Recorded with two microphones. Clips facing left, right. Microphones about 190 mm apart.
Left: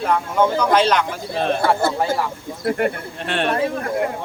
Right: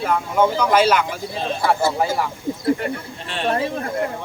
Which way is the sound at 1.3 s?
60° left (ahead or behind).